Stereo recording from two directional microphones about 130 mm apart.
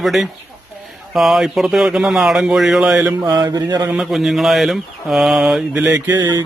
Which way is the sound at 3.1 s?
25° right (ahead or behind).